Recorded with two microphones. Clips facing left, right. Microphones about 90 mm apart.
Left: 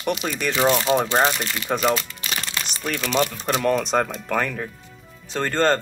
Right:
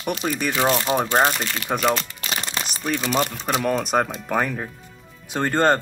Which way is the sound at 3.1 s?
10° right (ahead or behind).